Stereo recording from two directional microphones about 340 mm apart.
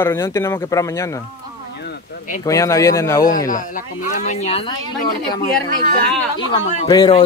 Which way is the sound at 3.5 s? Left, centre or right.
Left.